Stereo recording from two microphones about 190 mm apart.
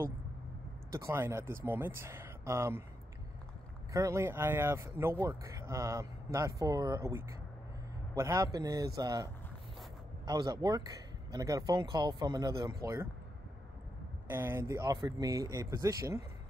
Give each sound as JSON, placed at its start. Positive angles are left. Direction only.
{"t": 0.9, "sound": "speech", "side_deg": -15}
{"t": 3.9, "sound": "speech", "side_deg": -15}
{"t": 14.3, "sound": "speech", "side_deg": -10}